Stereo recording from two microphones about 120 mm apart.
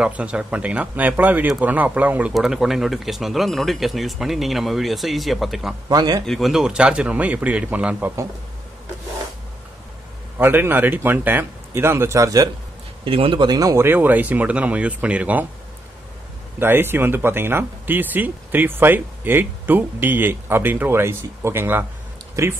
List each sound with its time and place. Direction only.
0.0 s speech: 10° right (ahead or behind)
5.9 s speech: 35° right (ahead or behind)
6.2 s speech: centre (ahead or behind)
10.3 s speech: 15° right (ahead or behind)
13.0 s speech: 50° right (ahead or behind); by 15.4 s 10° right (ahead or behind)
16.5 s speech: 20° right (ahead or behind)